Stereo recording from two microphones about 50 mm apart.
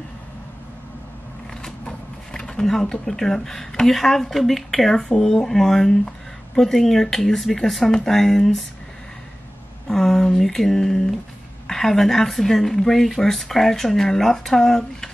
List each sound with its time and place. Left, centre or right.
1.6 s speech: centre
9.8 s speech: centre